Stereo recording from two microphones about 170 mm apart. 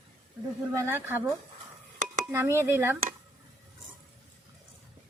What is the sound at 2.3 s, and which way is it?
Speech, 15° right (ahead or behind).